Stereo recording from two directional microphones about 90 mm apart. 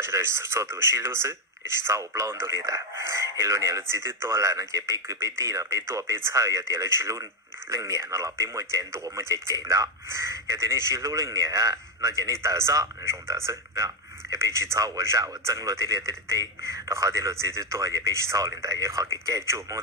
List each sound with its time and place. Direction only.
0.0 s speech: 30° right (ahead or behind)